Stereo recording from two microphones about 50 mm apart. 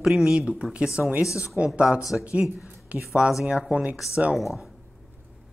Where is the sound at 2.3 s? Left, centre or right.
Right.